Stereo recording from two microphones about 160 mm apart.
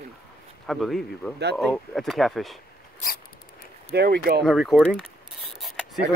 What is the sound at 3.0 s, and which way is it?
Mouse, 65° left (ahead or behind).